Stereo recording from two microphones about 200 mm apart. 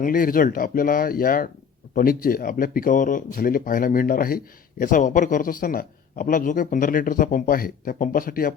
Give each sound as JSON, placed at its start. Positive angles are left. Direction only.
{"t": 0.0, "sound": "speech", "side_deg": 45}